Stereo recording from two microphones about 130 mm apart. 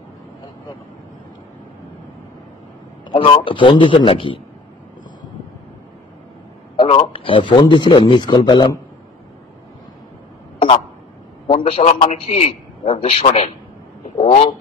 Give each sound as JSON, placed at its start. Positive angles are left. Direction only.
{"t": 3.1, "sound": "a man's voice", "side_deg": 40}
{"t": 6.8, "sound": "a man's voice", "side_deg": 40}
{"t": 11.4, "sound": "a man's voice", "side_deg": 45}